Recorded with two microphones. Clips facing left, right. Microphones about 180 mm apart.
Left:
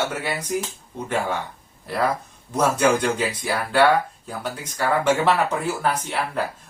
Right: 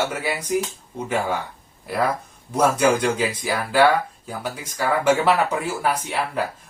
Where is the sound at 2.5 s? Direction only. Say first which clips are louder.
Right 1 dB; 5° right (ahead or behind).